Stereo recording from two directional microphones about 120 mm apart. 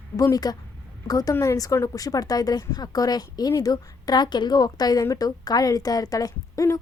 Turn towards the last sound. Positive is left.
turn(degrees=30)  # may be behind; listen again after turning